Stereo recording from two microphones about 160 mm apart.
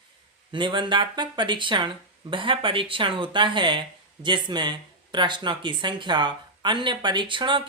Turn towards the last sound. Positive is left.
turn(degrees=-30)  # may be behind; listen again after turning